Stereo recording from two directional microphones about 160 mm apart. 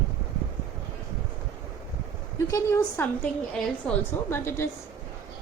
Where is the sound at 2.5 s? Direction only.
15° left (ahead or behind).